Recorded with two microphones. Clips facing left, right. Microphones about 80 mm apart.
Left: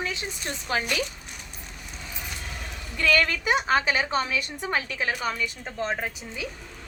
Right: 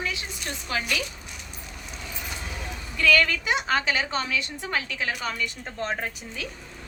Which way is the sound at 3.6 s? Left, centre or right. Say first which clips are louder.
Left 2 dB; centre.